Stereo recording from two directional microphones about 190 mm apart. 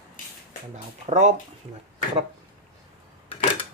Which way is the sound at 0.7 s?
35° right (ahead or behind).